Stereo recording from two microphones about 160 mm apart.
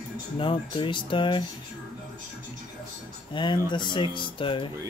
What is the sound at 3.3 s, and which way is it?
Speech, 30° left (ahead or behind).